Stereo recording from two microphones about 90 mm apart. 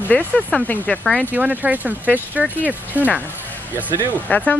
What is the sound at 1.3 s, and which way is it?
Speech, 20° right (ahead or behind).